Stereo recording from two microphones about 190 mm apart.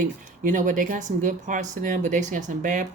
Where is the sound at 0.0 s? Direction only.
45° right (ahead or behind).